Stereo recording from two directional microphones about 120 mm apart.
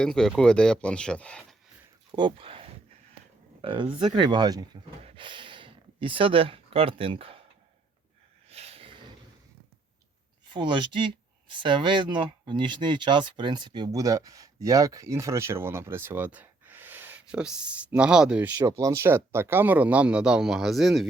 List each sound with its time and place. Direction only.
0.0 s speech: 5° left (ahead or behind)
2.1 s speech: 45° right (ahead or behind)
5.0 s speech: 45° right (ahead or behind)
8.4 s snort: 60° right (ahead or behind)
10.5 s speech: 40° right (ahead or behind); by 18.5 s 10° right (ahead or behind)
18.5 s speech: 25° right (ahead or behind); by 21.1 s centre (ahead or behind)